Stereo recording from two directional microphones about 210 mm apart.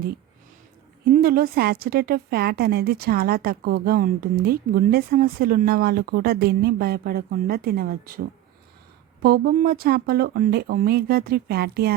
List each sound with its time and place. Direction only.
1.1 s a woman's voice: 45° right (ahead or behind)
9.2 s a woman's voice: 45° right (ahead or behind)